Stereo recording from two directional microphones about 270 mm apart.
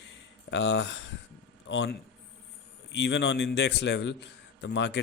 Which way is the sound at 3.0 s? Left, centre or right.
Left.